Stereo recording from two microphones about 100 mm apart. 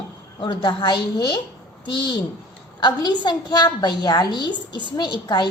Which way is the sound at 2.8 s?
45° left (ahead or behind).